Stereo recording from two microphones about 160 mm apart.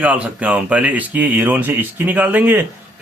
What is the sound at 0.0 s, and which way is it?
Speech, 10° right (ahead or behind).